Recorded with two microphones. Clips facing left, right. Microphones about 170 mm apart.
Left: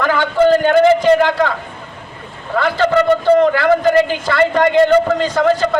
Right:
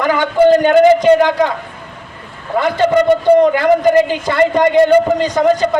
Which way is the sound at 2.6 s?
20° right (ahead or behind).